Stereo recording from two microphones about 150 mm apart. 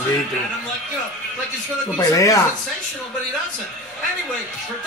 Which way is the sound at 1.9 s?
25° left (ahead or behind).